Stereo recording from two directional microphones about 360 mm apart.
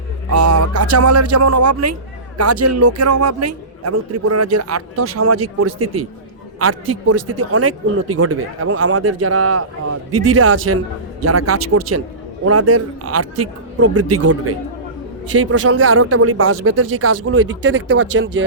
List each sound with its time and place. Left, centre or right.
0.3 s a man's voice: right